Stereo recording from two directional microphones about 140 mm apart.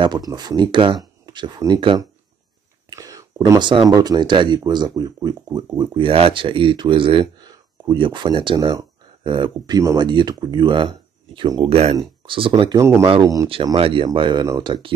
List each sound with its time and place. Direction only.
0.3 s speech: 30° right (ahead or behind)
11.7 s speech: 45° right (ahead or behind)
12.7 s speech: 20° right (ahead or behind)
13.7 s speech: 40° right (ahead or behind)
14.4 s speech: 25° right (ahead or behind)